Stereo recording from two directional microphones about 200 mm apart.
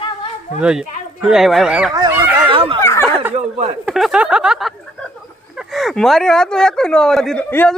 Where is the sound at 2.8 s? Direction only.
15° left (ahead or behind).